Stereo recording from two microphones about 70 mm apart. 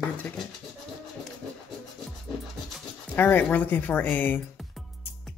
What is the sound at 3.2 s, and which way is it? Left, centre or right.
Speech, left.